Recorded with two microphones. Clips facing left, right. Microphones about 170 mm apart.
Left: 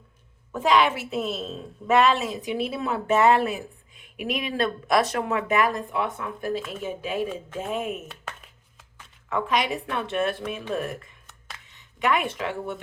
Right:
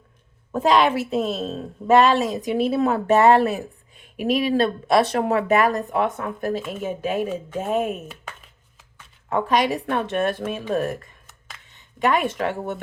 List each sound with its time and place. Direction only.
0.5 s a woman's voice: 40° right (ahead or behind)
8.0 s speech: centre (ahead or behind)
9.3 s a woman's voice: 40° right (ahead or behind)